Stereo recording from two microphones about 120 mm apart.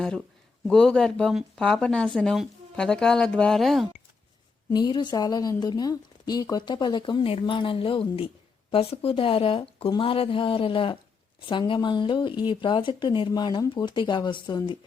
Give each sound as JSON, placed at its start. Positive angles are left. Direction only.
{"t": 0.0, "sound": "speech", "side_deg": 5}
{"t": 4.7, "sound": "speech", "side_deg": 40}